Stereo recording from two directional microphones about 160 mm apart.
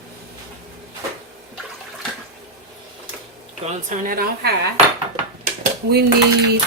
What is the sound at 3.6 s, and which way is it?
Speech, 55° right (ahead or behind).